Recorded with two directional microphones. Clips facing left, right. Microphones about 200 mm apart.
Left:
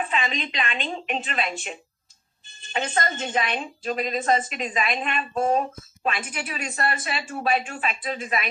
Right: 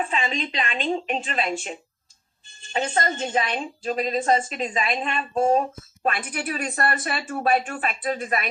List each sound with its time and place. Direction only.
0.1 s a woman's voice: 30° right (ahead or behind)
2.7 s a woman's voice: 30° right (ahead or behind)
6.0 s a woman's voice: 50° right (ahead or behind)